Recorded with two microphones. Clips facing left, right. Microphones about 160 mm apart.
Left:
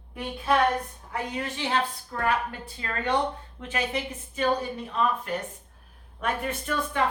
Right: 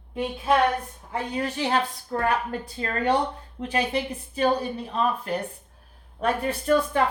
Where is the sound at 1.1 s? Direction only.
30° right (ahead or behind).